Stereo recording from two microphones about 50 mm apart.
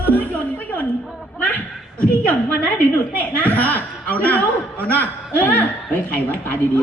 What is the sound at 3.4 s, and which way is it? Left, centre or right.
A man's voice, left.